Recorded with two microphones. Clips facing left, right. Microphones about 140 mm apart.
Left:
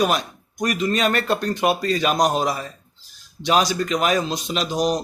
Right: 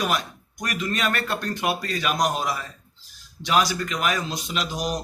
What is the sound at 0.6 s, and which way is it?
A man's voice, 25° left (ahead or behind).